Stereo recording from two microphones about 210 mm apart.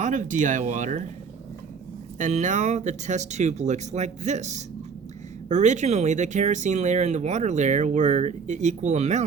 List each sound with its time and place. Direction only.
0.0 s speech: 35° right (ahead or behind)
2.1 s speech: 35° right (ahead or behind)